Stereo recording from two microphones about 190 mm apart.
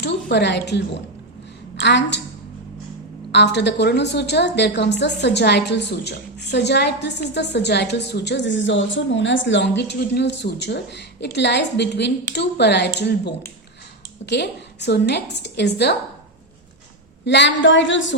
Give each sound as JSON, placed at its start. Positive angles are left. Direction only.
{"t": 0.0, "sound": "a woman's voice", "side_deg": 65}
{"t": 3.3, "sound": "a woman's voice", "side_deg": 65}
{"t": 17.2, "sound": "a sound", "side_deg": 65}